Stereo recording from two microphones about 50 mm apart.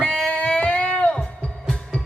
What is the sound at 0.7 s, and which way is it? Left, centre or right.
Music, left.